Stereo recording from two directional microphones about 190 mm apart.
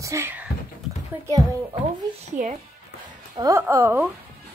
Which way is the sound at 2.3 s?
40° right (ahead or behind).